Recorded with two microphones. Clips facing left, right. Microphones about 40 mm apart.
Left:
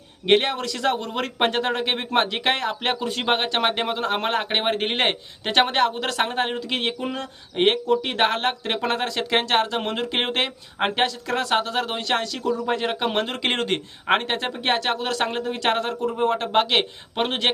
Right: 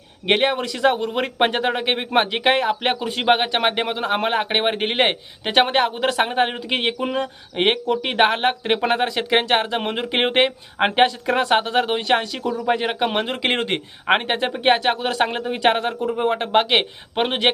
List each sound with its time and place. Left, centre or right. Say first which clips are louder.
0.3 s speech: right 1 dB; centre